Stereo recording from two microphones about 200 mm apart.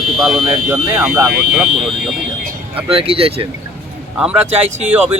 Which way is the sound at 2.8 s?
30° right (ahead or behind).